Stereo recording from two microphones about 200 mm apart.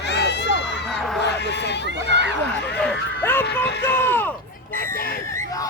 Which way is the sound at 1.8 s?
60° right (ahead or behind).